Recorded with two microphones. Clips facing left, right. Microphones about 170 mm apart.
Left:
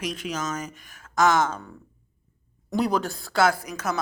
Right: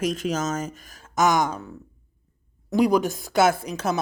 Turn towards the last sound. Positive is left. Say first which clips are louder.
# right 3 dB
turn(degrees=-30)  # may be behind; listen again after turning